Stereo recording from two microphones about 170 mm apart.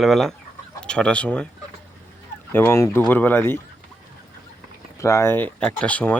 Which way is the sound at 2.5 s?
15° left (ahead or behind).